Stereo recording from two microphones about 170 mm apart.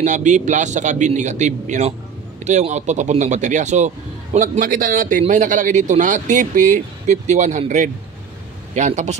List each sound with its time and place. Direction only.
0.0 s speech: 45° right (ahead or behind)